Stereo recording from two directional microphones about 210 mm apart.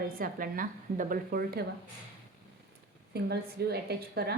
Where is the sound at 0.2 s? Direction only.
40° right (ahead or behind).